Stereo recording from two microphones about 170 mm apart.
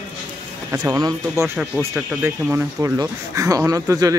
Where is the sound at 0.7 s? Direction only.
20° right (ahead or behind).